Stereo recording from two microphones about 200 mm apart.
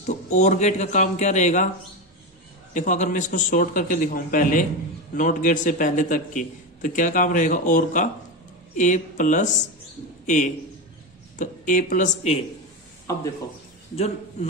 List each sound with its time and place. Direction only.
0.0 s a man's voice: 35° left (ahead or behind)
2.7 s a man's voice: 40° left (ahead or behind)